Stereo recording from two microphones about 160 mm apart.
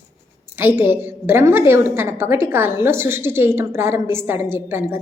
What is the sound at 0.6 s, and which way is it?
A woman's voice, 15° right (ahead or behind).